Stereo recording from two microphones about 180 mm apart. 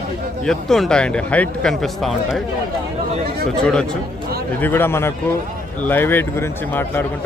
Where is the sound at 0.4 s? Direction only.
5° left (ahead or behind).